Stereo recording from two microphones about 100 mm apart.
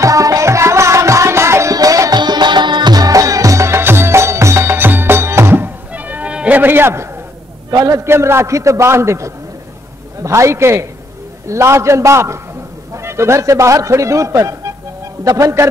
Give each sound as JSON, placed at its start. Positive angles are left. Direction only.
{"t": 0.0, "sound": "music", "side_deg": -35}
{"t": 7.7, "sound": "a man's voice", "side_deg": -40}
{"t": 8.0, "sound": "a man's voice", "side_deg": -25}